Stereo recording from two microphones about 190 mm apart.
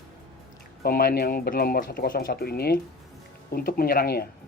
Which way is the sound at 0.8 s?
50° left (ahead or behind).